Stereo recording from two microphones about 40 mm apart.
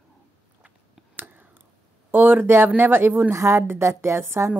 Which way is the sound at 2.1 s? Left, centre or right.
Right.